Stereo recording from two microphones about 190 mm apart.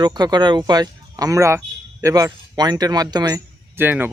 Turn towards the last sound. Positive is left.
turn(degrees=-10)  # may be behind; listen again after turning